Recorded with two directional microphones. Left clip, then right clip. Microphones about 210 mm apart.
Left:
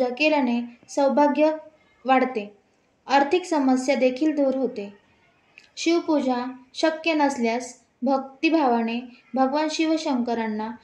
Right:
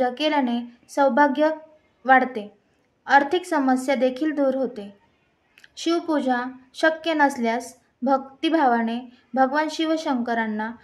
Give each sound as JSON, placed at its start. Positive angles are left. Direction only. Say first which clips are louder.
{"t": 0.0, "sound": "a woman's voice", "louder": "left 1 dB", "side_deg": -30}